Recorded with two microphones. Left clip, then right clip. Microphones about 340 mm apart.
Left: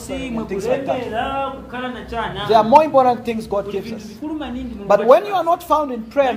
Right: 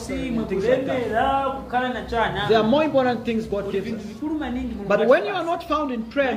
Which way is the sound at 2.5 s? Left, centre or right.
Centre.